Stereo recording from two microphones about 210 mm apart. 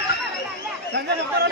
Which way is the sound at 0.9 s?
55° right (ahead or behind).